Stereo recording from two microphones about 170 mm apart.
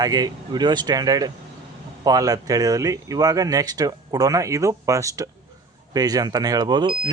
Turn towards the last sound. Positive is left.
turn(degrees=-25)  # may be behind; listen again after turning